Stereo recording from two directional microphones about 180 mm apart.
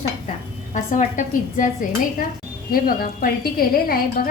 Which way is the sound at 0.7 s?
45° left (ahead or behind).